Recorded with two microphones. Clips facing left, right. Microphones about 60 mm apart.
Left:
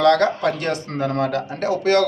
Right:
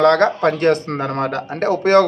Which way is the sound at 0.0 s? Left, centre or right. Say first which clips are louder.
Right 3 dB; right.